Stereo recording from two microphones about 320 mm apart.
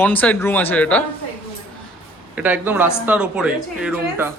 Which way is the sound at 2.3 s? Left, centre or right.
Centre.